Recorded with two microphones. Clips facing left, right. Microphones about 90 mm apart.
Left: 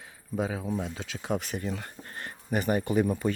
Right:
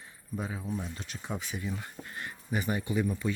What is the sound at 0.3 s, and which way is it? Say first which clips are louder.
Speech: left 6 dB; 90° left.